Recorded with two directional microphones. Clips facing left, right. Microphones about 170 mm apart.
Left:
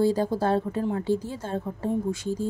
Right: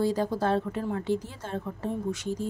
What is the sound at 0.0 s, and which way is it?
A woman's voice, 30° left (ahead or behind).